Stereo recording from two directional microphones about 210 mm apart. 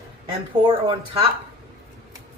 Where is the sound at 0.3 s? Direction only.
20° right (ahead or behind).